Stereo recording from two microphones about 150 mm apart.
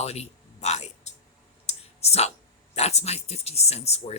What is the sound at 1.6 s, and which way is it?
Clicking, 45° left (ahead or behind).